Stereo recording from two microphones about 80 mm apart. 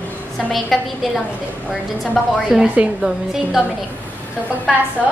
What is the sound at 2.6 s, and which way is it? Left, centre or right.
Speech, centre.